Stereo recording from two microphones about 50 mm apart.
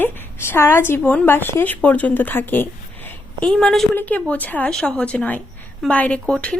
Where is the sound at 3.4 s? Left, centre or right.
Centre.